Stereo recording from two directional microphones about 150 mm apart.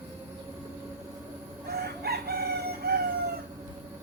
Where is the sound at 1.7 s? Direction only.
90° right.